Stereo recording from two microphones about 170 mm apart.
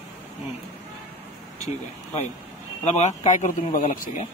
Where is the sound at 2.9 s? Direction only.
45° left (ahead or behind).